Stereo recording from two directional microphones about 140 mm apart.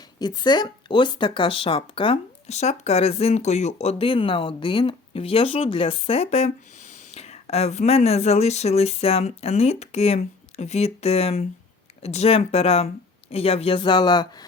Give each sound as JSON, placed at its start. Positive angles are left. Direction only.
{"t": 0.2, "sound": "speech", "side_deg": 30}